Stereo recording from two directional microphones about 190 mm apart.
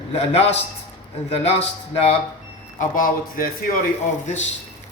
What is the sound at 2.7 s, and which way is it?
Speech, 45° left (ahead or behind).